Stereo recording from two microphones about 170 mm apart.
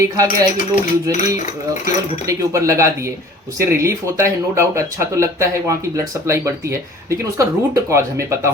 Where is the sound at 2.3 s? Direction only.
20° right (ahead or behind).